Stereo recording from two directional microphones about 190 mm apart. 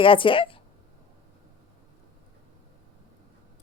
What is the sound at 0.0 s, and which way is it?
Speech, 25° left (ahead or behind).